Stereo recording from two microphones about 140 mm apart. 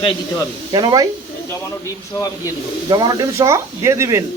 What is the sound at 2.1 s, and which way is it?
Speech, 25° left (ahead or behind).